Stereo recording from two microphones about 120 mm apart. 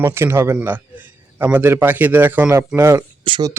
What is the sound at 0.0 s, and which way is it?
A man's voice, 20° right (ahead or behind).